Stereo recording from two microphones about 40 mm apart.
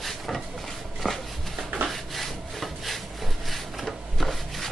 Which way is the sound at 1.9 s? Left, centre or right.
Centre.